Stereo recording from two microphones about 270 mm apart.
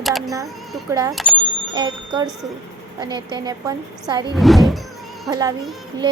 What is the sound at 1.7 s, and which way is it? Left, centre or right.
A woman's voice, centre.